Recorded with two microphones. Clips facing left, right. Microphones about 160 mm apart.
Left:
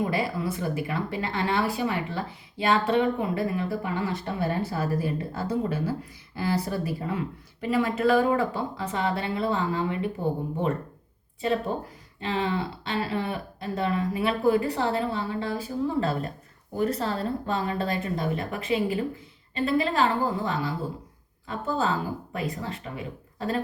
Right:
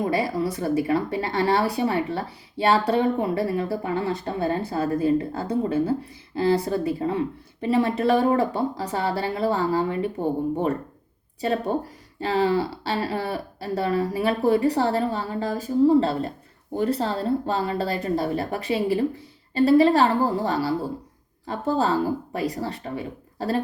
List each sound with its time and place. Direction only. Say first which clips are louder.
0.0 s speech: right 4 dB; 35° right (ahead or behind)
11.3 s speech: right 3 dB; 35° right (ahead or behind)